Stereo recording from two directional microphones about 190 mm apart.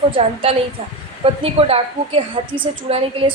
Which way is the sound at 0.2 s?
30° right (ahead or behind).